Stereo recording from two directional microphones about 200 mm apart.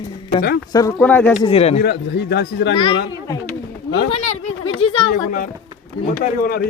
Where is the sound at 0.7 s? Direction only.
15° left (ahead or behind).